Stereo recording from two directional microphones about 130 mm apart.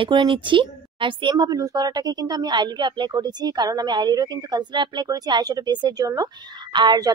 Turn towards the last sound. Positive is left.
turn(degrees=-30)  # may be behind; listen again after turning